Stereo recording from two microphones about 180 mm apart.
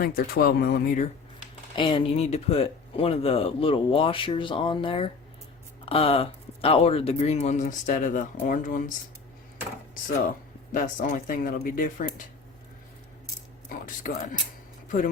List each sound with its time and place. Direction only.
0.0 s speech: 60° left (ahead or behind)
1.7 s speech: 30° left (ahead or behind); by 8.8 s 45° left (ahead or behind)
10.8 s speech: 45° left (ahead or behind)
13.7 s speech: 50° left (ahead or behind)